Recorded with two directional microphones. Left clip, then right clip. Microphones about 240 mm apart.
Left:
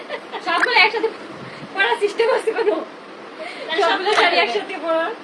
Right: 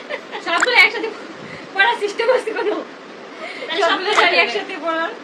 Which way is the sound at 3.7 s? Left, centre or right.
Centre.